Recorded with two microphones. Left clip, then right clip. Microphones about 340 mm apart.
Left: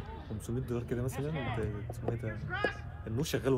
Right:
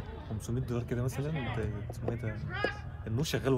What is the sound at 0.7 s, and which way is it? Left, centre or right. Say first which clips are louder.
Speech: even; right.